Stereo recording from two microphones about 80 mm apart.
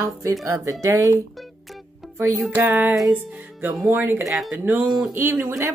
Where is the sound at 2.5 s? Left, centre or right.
Right.